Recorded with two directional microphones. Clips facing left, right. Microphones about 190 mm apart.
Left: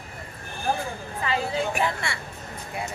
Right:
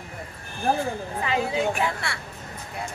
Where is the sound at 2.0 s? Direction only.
Centre (ahead or behind).